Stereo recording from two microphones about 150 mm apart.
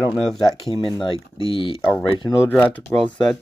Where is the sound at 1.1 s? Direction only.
35° left (ahead or behind).